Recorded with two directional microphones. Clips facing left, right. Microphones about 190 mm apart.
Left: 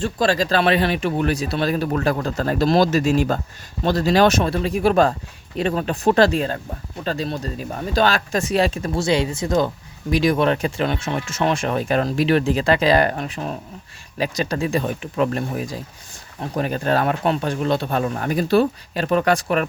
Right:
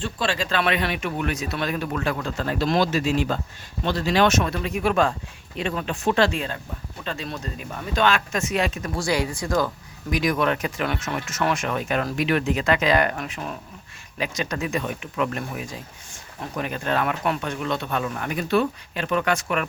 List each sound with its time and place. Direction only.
0.0 s speech: 40° left (ahead or behind)